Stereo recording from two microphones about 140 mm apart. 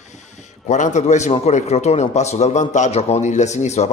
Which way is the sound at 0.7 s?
60° left (ahead or behind).